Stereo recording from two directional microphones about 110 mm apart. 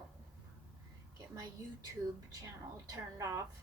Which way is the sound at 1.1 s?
35° right (ahead or behind).